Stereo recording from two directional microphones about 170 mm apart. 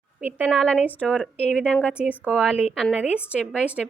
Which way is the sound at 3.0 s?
5° right (ahead or behind).